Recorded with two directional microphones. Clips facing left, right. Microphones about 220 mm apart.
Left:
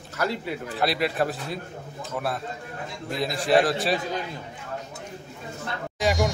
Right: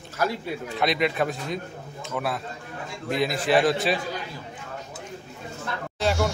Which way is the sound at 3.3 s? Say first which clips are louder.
Even; 25° left (ahead or behind).